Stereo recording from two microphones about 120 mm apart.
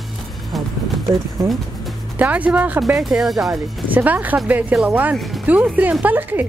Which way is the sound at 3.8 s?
15° right (ahead or behind).